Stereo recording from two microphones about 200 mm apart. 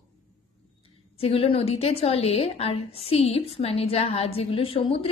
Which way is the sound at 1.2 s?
30° left (ahead or behind).